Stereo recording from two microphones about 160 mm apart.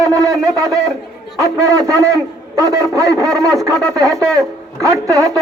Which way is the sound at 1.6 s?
20° right (ahead or behind).